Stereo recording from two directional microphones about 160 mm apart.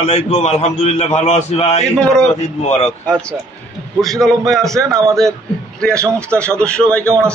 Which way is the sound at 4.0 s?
Centre (ahead or behind).